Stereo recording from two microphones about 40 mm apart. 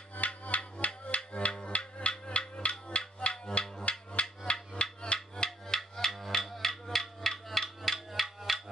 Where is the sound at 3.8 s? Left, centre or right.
Left.